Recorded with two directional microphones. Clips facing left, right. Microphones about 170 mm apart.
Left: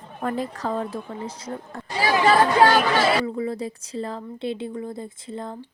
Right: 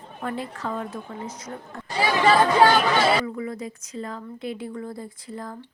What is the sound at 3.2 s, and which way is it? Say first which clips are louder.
A woman's voice: left 4 dB; 30° left (ahead or behind).